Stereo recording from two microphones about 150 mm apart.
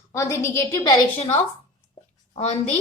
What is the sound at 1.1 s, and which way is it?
A woman's voice, 45° left (ahead or behind).